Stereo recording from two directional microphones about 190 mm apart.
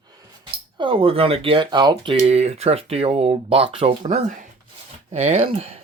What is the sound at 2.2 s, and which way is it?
Speech, 35° right (ahead or behind).